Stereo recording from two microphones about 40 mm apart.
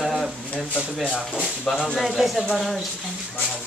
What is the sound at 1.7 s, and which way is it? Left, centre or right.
Speech, centre.